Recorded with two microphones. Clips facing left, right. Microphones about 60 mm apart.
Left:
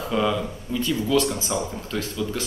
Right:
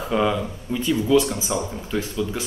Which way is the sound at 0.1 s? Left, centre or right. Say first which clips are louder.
Right 2 dB; centre.